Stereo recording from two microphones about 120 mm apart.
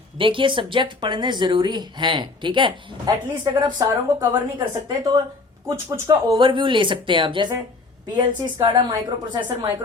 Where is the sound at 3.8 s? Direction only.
30° right (ahead or behind).